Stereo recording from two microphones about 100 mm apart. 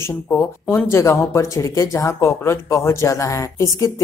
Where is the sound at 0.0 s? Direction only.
25° left (ahead or behind).